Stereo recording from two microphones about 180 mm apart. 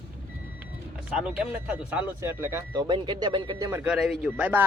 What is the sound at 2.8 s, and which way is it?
Speech, 25° right (ahead or behind).